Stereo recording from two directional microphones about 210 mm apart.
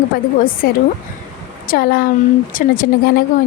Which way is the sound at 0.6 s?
45° left (ahead or behind).